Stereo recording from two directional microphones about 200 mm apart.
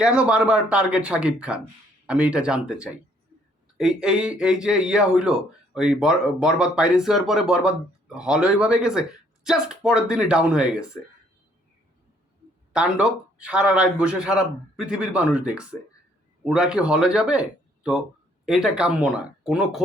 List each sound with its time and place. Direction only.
0.0 s speech: 5° right (ahead or behind)
12.7 s speech: 5° right (ahead or behind)